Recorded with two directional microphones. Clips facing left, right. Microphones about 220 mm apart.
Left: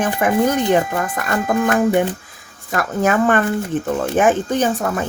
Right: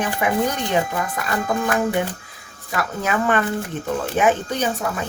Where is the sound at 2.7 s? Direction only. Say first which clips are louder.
Left 6 dB; 50° left (ahead or behind).